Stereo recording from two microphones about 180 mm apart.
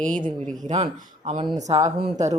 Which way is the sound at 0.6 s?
40° right (ahead or behind).